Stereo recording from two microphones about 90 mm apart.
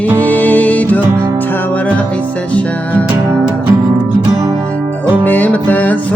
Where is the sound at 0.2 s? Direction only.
20° left (ahead or behind).